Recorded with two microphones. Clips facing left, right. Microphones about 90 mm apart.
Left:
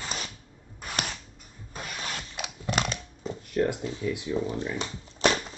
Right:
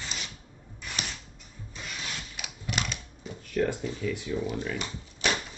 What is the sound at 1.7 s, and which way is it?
Rub, 50° left (ahead or behind).